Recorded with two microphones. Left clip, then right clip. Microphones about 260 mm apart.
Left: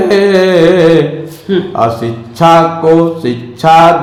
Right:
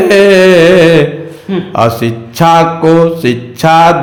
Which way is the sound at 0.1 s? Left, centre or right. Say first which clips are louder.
Right 4 dB; right.